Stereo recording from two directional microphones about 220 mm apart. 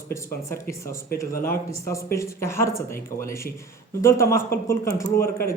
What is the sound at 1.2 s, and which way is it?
Speech, 10° left (ahead or behind).